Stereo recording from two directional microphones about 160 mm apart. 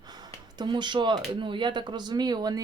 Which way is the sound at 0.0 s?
25° right (ahead or behind).